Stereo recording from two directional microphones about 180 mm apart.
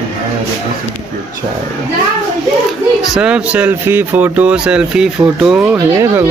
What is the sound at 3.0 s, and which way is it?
Speech, 5° right (ahead or behind).